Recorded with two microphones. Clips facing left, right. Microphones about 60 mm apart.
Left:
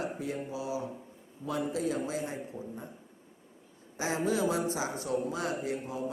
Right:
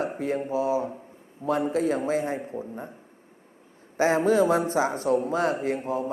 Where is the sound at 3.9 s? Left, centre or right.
Right.